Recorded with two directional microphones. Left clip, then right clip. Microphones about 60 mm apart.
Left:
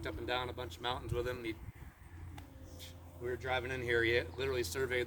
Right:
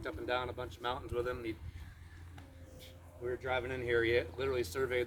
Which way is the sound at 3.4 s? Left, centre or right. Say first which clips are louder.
Even; right.